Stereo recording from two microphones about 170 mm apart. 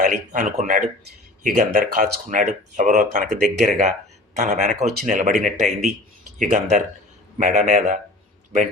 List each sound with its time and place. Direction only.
0.0 s speech: 45° right (ahead or behind)